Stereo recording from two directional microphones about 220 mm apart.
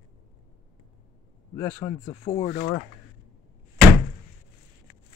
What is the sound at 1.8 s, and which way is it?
Speech, 25° left (ahead or behind).